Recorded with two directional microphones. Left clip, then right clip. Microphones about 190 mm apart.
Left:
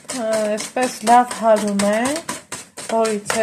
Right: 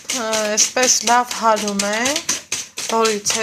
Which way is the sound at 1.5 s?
5° right (ahead or behind).